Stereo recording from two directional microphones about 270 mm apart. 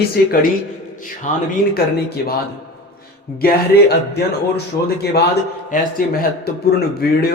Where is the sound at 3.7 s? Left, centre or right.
Left.